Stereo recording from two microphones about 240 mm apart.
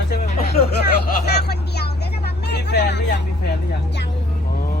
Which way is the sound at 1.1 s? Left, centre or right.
Left.